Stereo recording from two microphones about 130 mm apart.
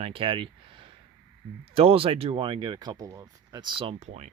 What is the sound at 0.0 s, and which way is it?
Speech, 45° right (ahead or behind).